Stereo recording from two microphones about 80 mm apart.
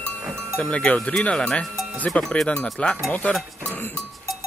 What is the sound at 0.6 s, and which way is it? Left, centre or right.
Speech, centre.